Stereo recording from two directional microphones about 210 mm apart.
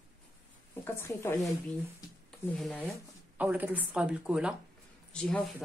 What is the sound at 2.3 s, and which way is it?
Speech, centre (ahead or behind).